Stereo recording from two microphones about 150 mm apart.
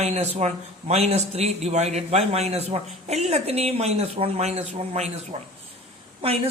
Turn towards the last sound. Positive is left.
turn(degrees=-40)  # may be behind; listen again after turning